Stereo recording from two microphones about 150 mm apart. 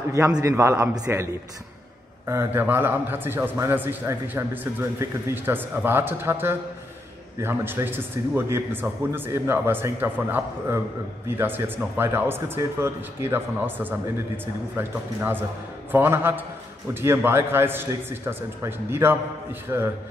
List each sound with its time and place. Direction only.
0.4 s a man's voice: 20° right (ahead or behind)